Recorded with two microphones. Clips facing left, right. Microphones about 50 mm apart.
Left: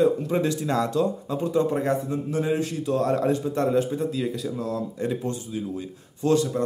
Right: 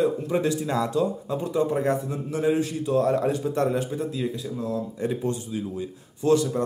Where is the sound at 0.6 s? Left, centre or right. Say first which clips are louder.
Left 1 dB; centre.